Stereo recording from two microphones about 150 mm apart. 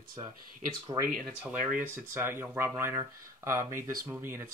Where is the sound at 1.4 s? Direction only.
10° right (ahead or behind).